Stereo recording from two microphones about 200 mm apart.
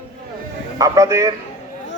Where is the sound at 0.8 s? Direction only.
15° right (ahead or behind).